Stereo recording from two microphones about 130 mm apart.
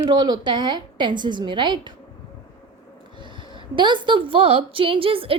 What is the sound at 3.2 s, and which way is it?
A woman's voice, 35° right (ahead or behind).